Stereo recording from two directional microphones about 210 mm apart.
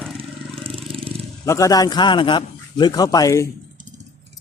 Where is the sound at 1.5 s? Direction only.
15° left (ahead or behind).